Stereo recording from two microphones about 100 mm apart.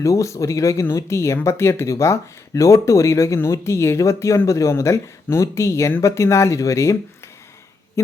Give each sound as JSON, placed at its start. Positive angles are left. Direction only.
{"t": 0.0, "sound": "speech", "side_deg": 30}
{"t": 8.0, "sound": "speech", "side_deg": 25}